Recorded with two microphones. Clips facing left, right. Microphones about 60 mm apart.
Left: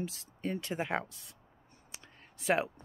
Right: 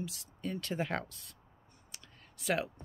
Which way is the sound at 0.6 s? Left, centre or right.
Centre.